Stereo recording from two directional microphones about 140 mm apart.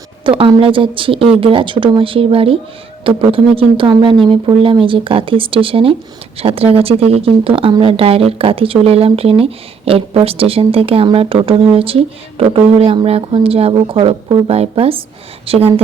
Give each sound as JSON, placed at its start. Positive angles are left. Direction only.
{"t": 0.3, "sound": "speech", "side_deg": -40}